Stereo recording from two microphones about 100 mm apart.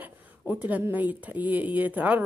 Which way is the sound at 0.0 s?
20° right (ahead or behind).